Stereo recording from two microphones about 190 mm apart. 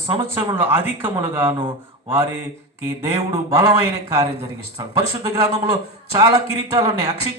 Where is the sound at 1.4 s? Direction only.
25° right (ahead or behind).